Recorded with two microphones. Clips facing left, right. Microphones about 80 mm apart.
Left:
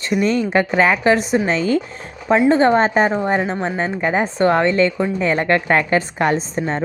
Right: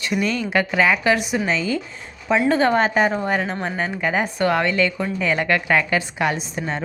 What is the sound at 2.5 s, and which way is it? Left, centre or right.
A woman's voice, left.